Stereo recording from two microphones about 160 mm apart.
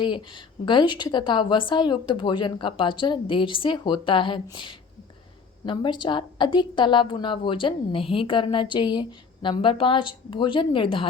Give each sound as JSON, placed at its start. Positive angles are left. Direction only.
{"t": 0.0, "sound": "a woman's voice", "side_deg": 30}